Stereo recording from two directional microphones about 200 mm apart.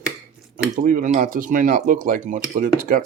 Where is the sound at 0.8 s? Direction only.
45° right (ahead or behind).